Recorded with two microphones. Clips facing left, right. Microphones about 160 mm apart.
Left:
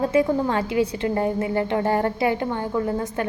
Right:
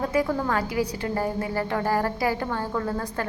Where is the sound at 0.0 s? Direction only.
25° left (ahead or behind).